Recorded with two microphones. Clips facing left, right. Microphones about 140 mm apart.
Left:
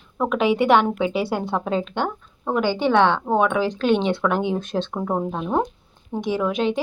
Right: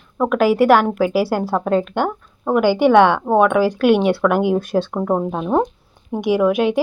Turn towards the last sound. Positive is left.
turn(degrees=-10)  # may be behind; listen again after turning